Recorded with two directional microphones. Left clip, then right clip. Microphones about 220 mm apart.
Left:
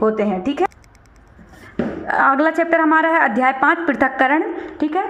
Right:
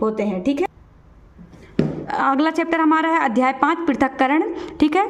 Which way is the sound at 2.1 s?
20° right (ahead or behind).